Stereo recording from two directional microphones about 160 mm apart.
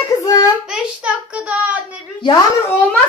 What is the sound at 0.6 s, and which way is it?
A man's voice, 5° right (ahead or behind).